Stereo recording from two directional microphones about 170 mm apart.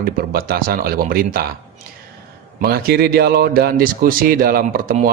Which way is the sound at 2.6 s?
65° right (ahead or behind).